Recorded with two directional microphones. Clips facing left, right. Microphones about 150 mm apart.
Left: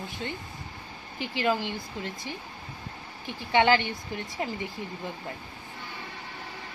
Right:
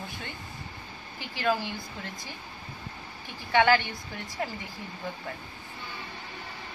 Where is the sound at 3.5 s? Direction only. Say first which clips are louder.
Even; 20° left (ahead or behind).